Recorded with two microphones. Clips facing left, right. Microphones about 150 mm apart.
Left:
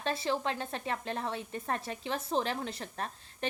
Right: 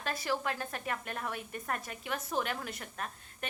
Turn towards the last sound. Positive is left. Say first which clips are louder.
# left 3 dB
turn(degrees=30)  # may be behind; listen again after turning